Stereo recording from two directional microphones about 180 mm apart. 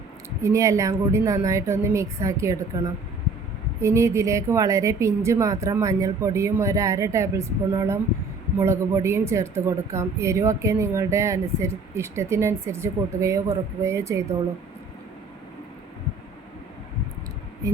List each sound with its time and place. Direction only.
0.4 s speech: 15° right (ahead or behind)